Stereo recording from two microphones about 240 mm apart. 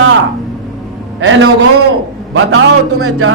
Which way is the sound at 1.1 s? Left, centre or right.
Right.